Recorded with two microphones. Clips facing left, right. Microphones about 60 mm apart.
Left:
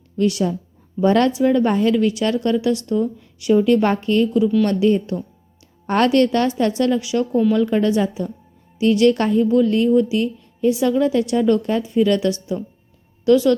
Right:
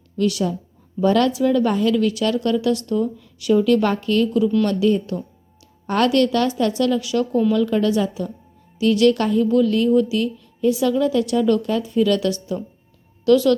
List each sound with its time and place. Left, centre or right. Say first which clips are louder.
0.2 s a woman's voice: left 2 dB; left